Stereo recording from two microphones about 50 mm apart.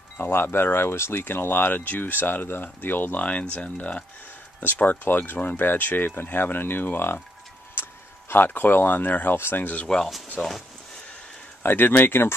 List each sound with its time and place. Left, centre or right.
0.2 s speech: left
1.2 s speech: left
3.5 s speech: left
7.8 s a sound: left
8.3 s speech: left
9.3 s speech: left
10.4 s speech: left
11.6 s speech: left